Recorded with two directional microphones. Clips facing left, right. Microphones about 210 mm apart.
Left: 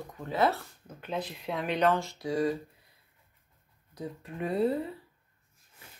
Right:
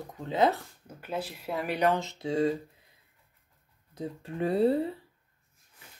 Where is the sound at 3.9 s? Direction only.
30° right (ahead or behind).